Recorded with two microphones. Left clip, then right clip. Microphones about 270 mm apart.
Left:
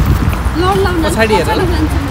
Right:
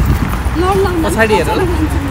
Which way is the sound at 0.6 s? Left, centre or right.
Centre.